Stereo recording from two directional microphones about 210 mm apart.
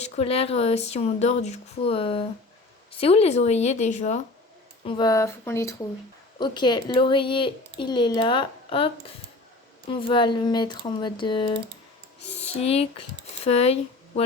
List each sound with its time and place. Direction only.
0.0 s speech: 30° left (ahead or behind)
4.9 s speech: 20° left (ahead or behind)